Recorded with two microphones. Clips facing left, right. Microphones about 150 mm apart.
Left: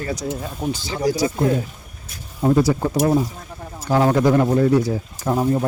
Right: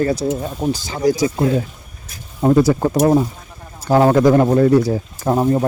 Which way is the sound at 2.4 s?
50° right (ahead or behind).